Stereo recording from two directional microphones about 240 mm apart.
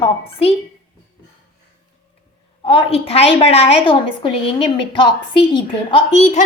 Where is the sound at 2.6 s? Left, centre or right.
Left.